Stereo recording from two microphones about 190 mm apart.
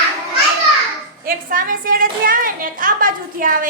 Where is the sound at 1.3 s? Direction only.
45° right (ahead or behind).